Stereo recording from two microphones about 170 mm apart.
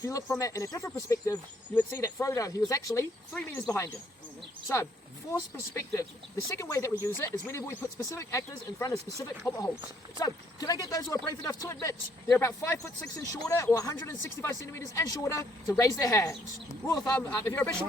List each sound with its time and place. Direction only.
0.0 s speech: 20° left (ahead or behind)
5.3 s speech: 15° left (ahead or behind)